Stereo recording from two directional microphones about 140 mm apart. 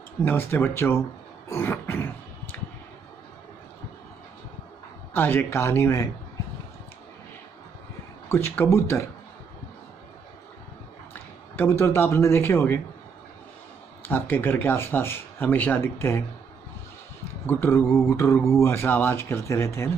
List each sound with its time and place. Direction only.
0.2 s speech: 15° left (ahead or behind)
5.1 s speech: 15° left (ahead or behind)
8.3 s speech: 15° left (ahead or behind)
11.5 s speech: 15° left (ahead or behind)
14.0 s speech: 15° left (ahead or behind)
17.5 s speech: 15° left (ahead or behind)